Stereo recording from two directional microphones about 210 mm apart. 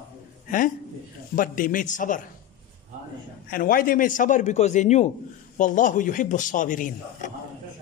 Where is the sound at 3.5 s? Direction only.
40° left (ahead or behind).